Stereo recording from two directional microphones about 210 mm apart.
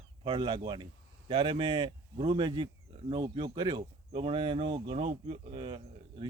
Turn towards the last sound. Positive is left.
turn(degrees=-25)  # may be behind; listen again after turning